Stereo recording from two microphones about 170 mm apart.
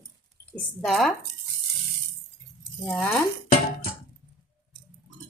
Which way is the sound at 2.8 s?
10° left (ahead or behind).